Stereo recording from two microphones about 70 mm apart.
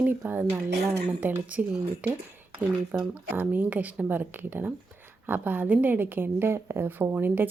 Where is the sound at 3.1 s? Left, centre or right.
Right.